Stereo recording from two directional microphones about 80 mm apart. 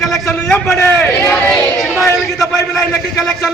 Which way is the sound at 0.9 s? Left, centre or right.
Left.